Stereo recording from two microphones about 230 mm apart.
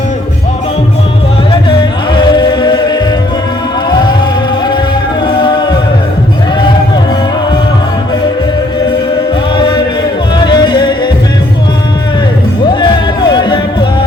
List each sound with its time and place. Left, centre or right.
1.7 s music: centre
5.2 s music: left
9.6 s a sound: left
10.3 s music: centre
13.3 s music: centre